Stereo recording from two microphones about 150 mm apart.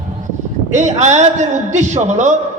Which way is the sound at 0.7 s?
50° right (ahead or behind).